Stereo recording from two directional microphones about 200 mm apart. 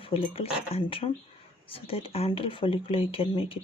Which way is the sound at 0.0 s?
30° left (ahead or behind).